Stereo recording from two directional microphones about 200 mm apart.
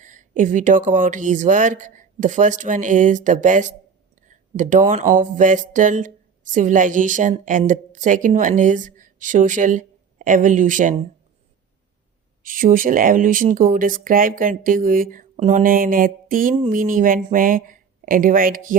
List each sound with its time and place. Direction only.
0.0 s speech: 40° right (ahead or behind)
12.4 s speech: 45° right (ahead or behind)